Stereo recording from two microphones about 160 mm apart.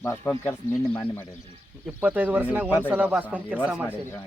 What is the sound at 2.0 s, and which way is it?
Speech, 10° right (ahead or behind).